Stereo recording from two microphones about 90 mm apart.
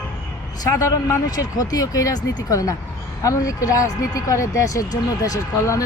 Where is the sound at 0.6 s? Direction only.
40° left (ahead or behind).